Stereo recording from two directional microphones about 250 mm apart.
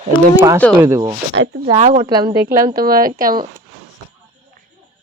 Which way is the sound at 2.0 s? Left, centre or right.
Centre.